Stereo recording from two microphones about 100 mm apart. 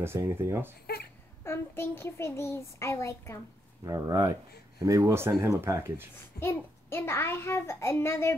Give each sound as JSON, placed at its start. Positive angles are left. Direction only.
{"t": 0.0, "sound": "speech", "side_deg": -25}
{"t": 1.4, "sound": "a child's voice", "side_deg": 25}
{"t": 3.8, "sound": "speech", "side_deg": -35}
{"t": 6.1, "sound": "a child's voice", "side_deg": 20}